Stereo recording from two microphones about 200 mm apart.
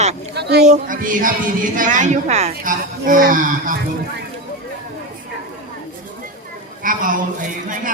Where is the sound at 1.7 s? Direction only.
40° right (ahead or behind).